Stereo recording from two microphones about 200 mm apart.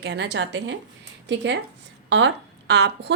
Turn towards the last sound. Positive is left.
turn(degrees=-60)  # may be behind; listen again after turning